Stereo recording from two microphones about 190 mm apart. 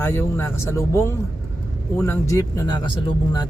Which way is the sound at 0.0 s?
10° left (ahead or behind).